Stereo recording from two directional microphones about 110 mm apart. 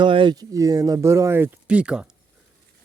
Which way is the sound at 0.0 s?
45° right (ahead or behind).